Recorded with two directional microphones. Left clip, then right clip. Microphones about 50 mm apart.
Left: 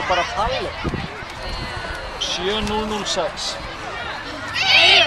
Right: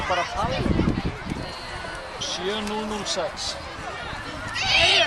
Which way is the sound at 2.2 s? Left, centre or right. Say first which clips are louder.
Left 6 dB; left.